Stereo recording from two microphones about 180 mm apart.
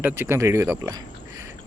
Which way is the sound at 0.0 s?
10° right (ahead or behind).